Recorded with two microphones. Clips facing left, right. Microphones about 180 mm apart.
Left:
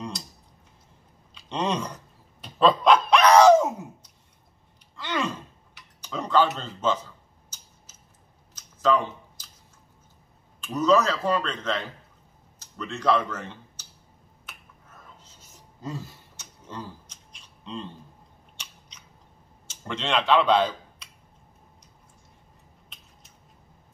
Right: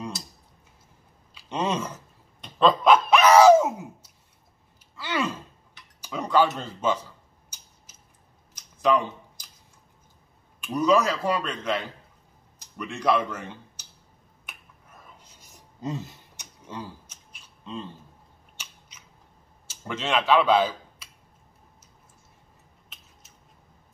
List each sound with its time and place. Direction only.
1.3 s speech: 5° right (ahead or behind)
2.4 s a sound: centre (ahead or behind)
10.6 s speech: 10° right (ahead or behind)
14.5 s finger snapping: 15° right (ahead or behind)
15.1 s a sound: 10° right (ahead or behind)
18.6 s biting: 5° right (ahead or behind)
19.7 s speech: 5° right (ahead or behind)